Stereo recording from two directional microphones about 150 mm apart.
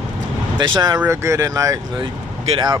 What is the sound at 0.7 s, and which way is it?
Speech, 30° right (ahead or behind).